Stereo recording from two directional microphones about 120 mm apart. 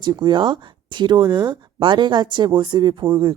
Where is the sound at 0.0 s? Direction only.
35° right (ahead or behind).